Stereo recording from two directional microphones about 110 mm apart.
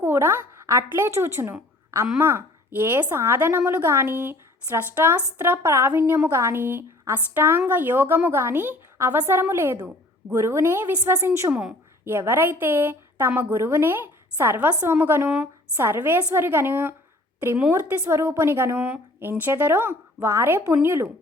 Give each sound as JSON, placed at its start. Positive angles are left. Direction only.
{"t": 0.0, "sound": "a woman's voice", "side_deg": -20}